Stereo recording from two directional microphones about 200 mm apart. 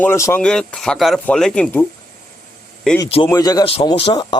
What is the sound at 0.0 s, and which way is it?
Speech, 15° left (ahead or behind).